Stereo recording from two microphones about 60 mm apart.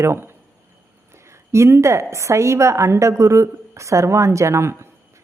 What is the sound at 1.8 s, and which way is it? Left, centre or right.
A woman's voice, right.